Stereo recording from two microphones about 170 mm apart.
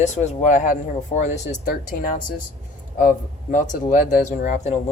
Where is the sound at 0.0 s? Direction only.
45° left (ahead or behind).